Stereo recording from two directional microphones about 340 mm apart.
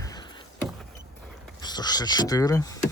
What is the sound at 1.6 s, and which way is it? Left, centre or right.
Speech, centre.